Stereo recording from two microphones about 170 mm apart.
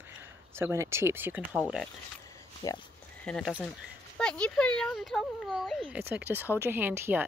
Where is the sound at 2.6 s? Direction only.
20° left (ahead or behind).